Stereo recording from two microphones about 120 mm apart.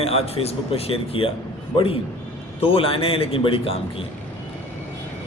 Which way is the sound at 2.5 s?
50° left (ahead or behind).